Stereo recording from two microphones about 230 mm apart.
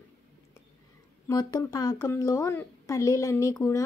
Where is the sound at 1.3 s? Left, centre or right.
Centre.